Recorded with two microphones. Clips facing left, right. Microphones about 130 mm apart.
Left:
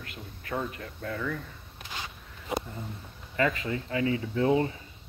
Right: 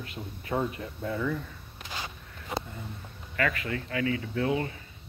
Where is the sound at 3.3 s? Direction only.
20° left (ahead or behind).